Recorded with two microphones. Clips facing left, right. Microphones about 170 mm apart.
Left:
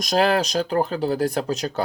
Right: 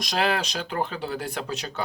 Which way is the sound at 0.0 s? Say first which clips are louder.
Left 6 dB; 40° left (ahead or behind).